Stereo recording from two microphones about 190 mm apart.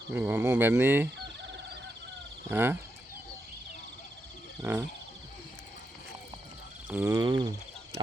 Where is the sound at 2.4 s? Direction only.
10° right (ahead or behind).